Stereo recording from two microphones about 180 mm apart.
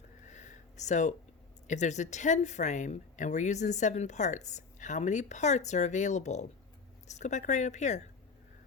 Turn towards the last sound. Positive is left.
turn(degrees=40)  # may be behind; listen again after turning